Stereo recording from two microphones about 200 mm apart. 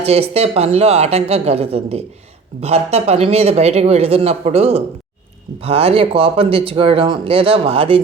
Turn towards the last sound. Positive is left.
turn(degrees=-30)  # may be behind; listen again after turning